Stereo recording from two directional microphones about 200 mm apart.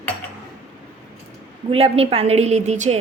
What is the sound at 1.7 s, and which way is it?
A woman's voice, 30° right (ahead or behind).